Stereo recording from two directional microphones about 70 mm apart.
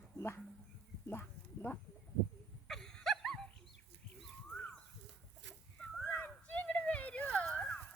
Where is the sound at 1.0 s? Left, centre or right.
Left.